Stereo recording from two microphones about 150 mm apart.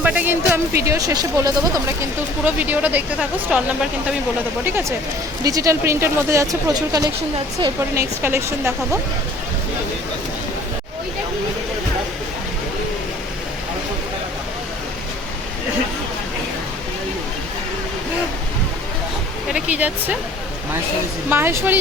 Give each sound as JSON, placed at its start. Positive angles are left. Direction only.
{"t": 0.0, "sound": "speech", "side_deg": -10}
{"t": 4.6, "sound": "speech", "side_deg": -15}
{"t": 19.5, "sound": "speech", "side_deg": -5}
{"t": 21.2, "sound": "speech", "side_deg": -15}